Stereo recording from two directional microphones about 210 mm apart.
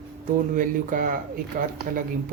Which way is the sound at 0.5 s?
40° right (ahead or behind).